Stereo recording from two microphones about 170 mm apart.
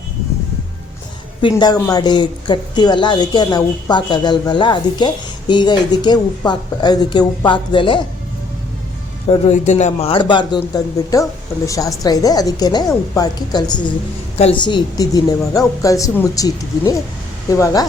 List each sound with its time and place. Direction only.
1.4 s speech: 30° left (ahead or behind)
9.5 s speech: 45° left (ahead or behind); by 13.8 s 25° left (ahead or behind)
14.3 s a woman's voice: 40° left (ahead or behind)
14.6 s speech: 25° left (ahead or behind)